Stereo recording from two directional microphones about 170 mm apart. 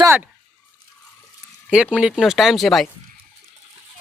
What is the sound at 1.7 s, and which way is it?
Speech, 5° right (ahead or behind).